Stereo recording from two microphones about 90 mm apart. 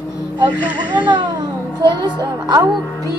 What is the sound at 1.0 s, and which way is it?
A child's voice, 55° right (ahead or behind).